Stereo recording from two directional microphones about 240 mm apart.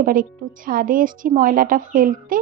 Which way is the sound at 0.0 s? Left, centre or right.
Right.